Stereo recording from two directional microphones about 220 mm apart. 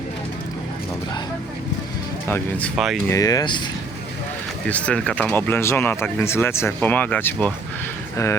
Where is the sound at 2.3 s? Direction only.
Centre (ahead or behind).